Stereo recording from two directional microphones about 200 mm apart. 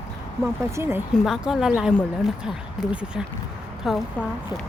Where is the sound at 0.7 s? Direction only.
10° right (ahead or behind).